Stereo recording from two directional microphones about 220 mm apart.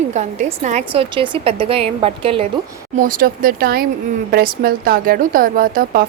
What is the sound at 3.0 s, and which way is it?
A woman's voice, 40° right (ahead or behind).